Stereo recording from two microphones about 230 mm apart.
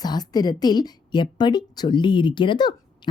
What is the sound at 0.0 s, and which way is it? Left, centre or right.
A woman's voice, centre.